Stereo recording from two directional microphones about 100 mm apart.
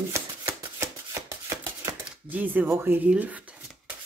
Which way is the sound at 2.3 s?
15° right (ahead or behind).